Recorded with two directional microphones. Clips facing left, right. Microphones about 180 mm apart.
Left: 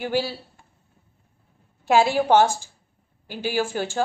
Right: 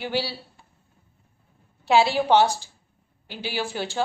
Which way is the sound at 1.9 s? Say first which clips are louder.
Left 1 dB; 50° left (ahead or behind).